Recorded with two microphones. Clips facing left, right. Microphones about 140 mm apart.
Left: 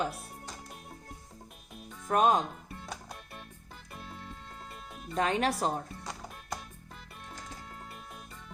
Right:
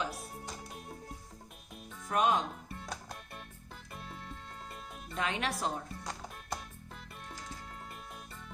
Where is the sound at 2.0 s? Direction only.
45° left (ahead or behind).